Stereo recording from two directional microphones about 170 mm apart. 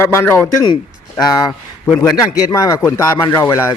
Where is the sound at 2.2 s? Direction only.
20° left (ahead or behind).